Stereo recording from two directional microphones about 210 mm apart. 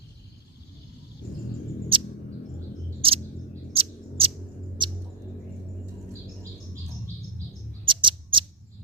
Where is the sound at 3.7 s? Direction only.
25° right (ahead or behind).